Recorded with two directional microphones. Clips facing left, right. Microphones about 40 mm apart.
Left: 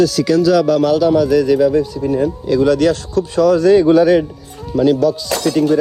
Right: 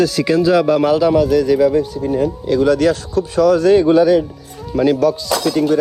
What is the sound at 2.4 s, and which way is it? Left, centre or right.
Speech, right.